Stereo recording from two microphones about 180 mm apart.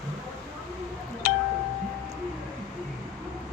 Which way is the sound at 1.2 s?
55° left (ahead or behind).